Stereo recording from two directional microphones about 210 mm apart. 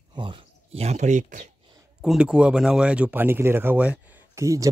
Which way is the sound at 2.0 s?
5° right (ahead or behind).